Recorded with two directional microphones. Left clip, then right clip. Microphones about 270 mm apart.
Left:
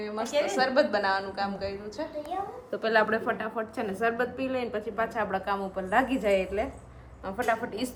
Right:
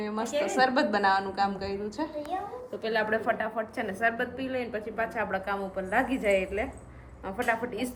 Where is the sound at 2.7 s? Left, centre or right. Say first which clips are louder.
Left 5 dB; left.